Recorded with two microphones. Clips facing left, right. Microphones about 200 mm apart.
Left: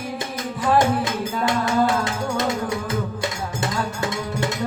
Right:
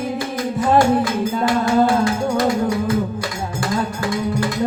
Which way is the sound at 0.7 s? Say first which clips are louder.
Right 4 dB; 20° left (ahead or behind).